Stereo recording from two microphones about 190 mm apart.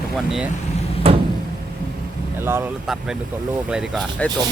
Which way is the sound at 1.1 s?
30° right (ahead or behind).